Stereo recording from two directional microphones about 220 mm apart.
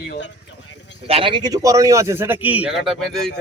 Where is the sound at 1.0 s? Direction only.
25° right (ahead or behind).